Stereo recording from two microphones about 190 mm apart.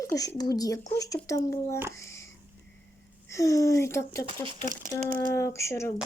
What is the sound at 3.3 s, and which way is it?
Speech, 15° left (ahead or behind).